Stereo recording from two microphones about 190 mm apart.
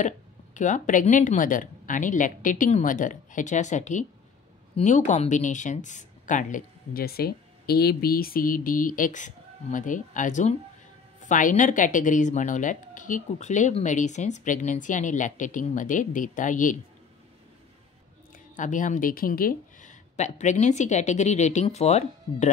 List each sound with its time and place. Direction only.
0.6 s speech: 40° left (ahead or behind)
18.6 s speech: 40° left (ahead or behind)